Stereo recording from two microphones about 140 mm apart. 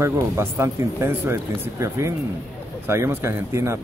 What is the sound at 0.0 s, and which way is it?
Speech, 20° right (ahead or behind).